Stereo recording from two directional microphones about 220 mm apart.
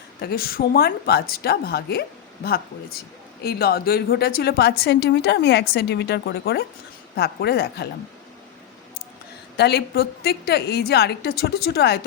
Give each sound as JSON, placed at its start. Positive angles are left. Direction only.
{"t": 0.2, "sound": "a woman's voice", "side_deg": 45}
{"t": 9.6, "sound": "a woman's voice", "side_deg": 45}